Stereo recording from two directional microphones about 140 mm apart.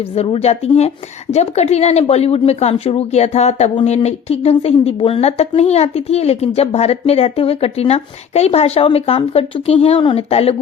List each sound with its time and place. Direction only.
0.2 s a woman's voice: 50° left (ahead or behind)